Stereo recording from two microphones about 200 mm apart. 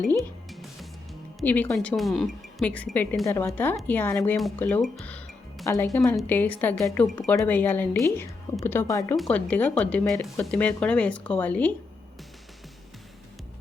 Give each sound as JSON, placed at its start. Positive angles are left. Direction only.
{"t": 0.1, "sound": "music", "side_deg": 0}
{"t": 1.4, "sound": "speech", "side_deg": 10}
{"t": 6.0, "sound": "speech", "side_deg": 5}